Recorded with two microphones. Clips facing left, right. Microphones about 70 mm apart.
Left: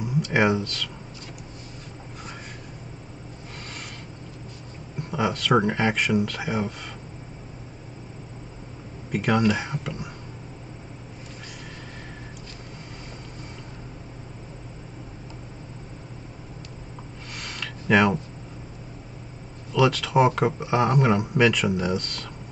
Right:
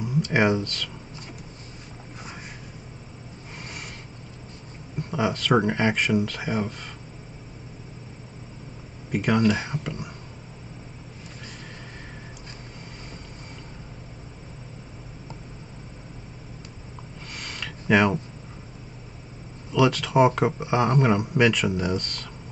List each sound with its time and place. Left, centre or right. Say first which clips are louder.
0.0 s speech: even; centre
5.1 s speech: even; centre
9.1 s speech: even; centre
17.4 s a sound: left 1 dB; centre
19.7 s speech: even; centre